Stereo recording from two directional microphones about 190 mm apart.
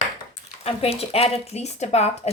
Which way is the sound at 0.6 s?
30° left (ahead or behind).